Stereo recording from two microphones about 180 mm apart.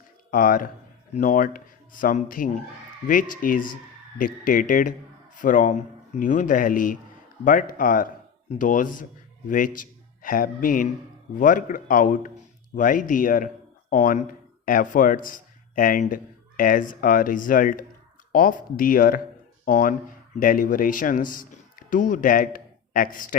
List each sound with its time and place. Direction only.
0.3 s a man's voice: 50° left (ahead or behind)